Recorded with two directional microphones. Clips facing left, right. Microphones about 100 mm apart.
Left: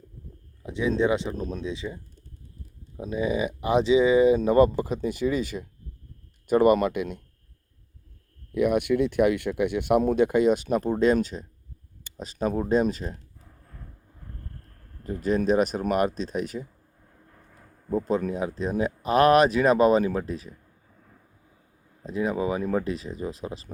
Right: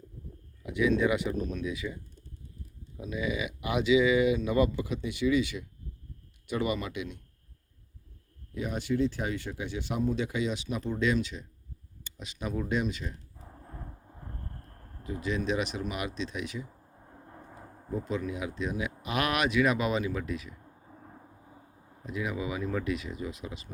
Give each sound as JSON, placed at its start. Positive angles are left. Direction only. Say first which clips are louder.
{"t": 0.6, "sound": "speech", "louder": "left 2 dB", "side_deg": 30}
{"t": 3.0, "sound": "speech", "louder": "left 6 dB", "side_deg": 35}
{"t": 8.5, "sound": "speech", "louder": "left 8 dB", "side_deg": 65}
{"t": 13.4, "sound": "a sound", "louder": "right 4 dB", "side_deg": -30}
{"t": 15.4, "sound": "speech", "louder": "left 9 dB", "side_deg": 45}
{"t": 16.9, "sound": "a sound", "louder": "right 5 dB", "side_deg": -35}
{"t": 17.9, "sound": "speech", "louder": "left 7 dB", "side_deg": 40}
{"t": 20.7, "sound": "vehicle", "louder": "right 6 dB", "side_deg": -30}
{"t": 22.0, "sound": "speech", "louder": "left 7 dB", "side_deg": 35}